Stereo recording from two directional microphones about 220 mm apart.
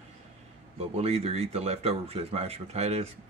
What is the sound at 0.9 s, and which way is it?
Speech, 30° right (ahead or behind).